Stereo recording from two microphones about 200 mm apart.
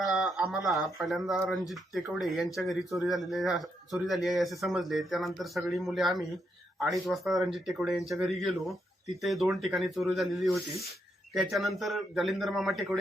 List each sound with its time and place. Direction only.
0.0 s speech: centre (ahead or behind)